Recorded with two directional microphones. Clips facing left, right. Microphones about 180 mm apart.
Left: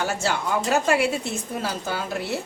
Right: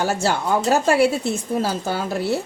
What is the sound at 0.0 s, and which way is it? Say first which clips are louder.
A woman's voice: right 4 dB; 35° right (ahead or behind).